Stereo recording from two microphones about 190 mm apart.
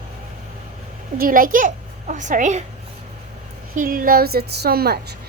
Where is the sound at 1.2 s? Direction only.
50° right (ahead or behind).